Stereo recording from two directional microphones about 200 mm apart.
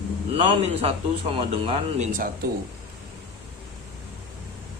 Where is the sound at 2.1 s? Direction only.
40° right (ahead or behind).